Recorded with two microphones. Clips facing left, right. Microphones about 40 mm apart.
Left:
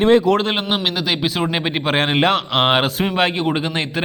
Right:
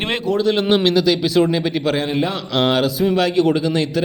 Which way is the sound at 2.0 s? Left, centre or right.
Left.